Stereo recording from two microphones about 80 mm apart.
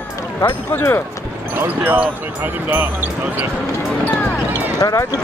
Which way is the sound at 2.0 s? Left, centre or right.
Right.